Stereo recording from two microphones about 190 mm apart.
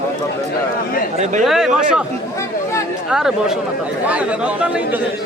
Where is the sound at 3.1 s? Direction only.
5° right (ahead or behind).